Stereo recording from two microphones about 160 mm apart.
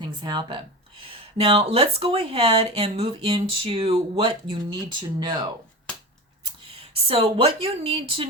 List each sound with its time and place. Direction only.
0.0 s speech: 30° right (ahead or behind)